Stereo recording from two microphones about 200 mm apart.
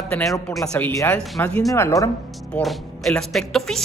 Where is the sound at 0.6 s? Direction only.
10° left (ahead or behind).